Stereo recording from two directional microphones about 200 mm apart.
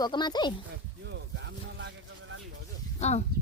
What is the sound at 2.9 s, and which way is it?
Speech, 35° left (ahead or behind).